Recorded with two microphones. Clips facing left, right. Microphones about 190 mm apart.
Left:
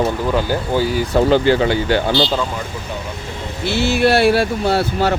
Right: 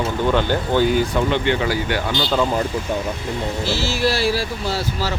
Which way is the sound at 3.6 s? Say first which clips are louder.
Left 7 dB; 60° left (ahead or behind).